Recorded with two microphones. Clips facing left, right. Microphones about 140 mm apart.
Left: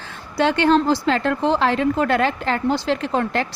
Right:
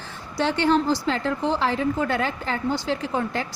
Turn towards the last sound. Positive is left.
turn(degrees=75)  # may be behind; listen again after turning